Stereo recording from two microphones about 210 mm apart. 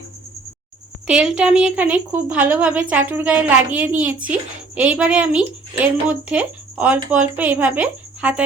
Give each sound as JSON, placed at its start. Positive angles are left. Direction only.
{"t": 1.0, "sound": "a woman's voice", "side_deg": -5}